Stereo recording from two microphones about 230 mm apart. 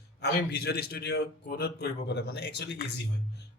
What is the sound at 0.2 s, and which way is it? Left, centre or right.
A man's voice, left.